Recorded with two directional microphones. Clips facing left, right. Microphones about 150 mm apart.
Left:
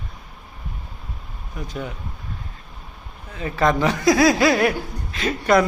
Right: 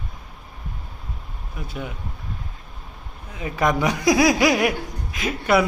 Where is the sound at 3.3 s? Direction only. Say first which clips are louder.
Left 2 dB; 15° right (ahead or behind).